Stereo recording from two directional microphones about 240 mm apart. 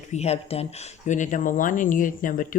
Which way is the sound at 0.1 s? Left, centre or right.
Left.